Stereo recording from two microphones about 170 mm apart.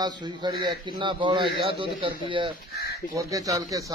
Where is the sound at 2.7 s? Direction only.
70° left (ahead or behind).